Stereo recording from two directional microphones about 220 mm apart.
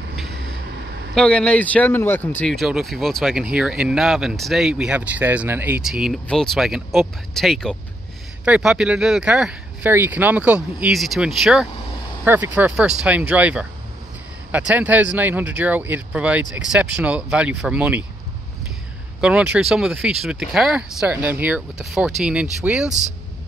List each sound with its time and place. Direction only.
0.3 s a sound: 55° right (ahead or behind)
1.1 s speech: 5° left (ahead or behind)
19.2 s speech: 5° right (ahead or behind)